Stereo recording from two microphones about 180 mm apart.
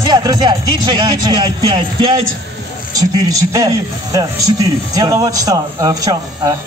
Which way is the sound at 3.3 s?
20° right (ahead or behind).